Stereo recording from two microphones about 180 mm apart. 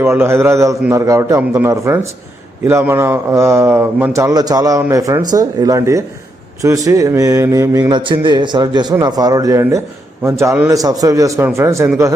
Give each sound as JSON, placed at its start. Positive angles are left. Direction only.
{"t": 0.0, "sound": "a man's voice", "side_deg": -15}